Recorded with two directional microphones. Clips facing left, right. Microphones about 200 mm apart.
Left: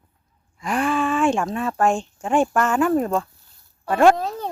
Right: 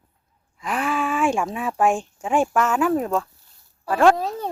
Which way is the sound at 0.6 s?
5° right (ahead or behind).